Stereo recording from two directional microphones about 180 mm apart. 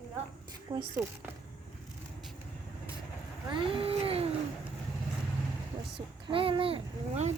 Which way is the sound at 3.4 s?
30° right (ahead or behind).